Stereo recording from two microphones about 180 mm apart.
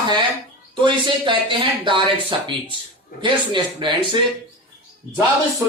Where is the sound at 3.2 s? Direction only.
25° right (ahead or behind).